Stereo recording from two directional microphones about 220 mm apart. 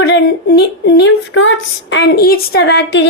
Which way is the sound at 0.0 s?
50° left (ahead or behind).